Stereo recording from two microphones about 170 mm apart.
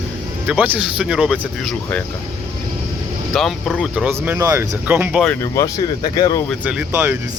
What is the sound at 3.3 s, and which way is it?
Speech, centre (ahead or behind).